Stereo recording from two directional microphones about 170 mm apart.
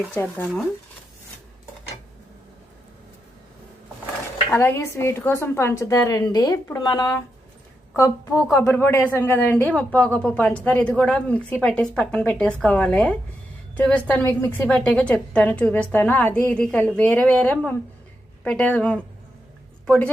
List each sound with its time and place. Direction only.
0.1 s a woman's voice: 10° left (ahead or behind)
4.5 s a woman's voice: 15° left (ahead or behind)